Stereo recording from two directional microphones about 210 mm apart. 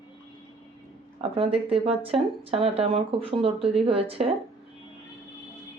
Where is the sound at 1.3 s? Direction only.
25° right (ahead or behind).